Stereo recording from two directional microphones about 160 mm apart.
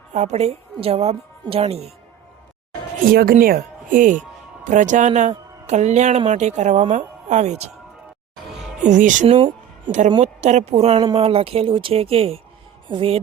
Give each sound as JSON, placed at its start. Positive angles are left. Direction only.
{"t": 0.1, "sound": "a woman's voice", "side_deg": -45}
{"t": 3.1, "sound": "a woman's voice", "side_deg": -65}
{"t": 8.8, "sound": "a woman's voice", "side_deg": -50}
{"t": 9.2, "sound": "a sound", "side_deg": -35}
{"t": 10.2, "sound": "a woman's voice", "side_deg": -45}